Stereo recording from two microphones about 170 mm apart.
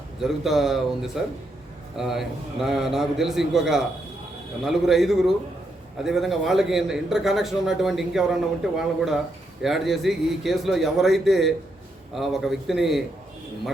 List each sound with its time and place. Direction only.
0.2 s a man's voice: centre (ahead or behind)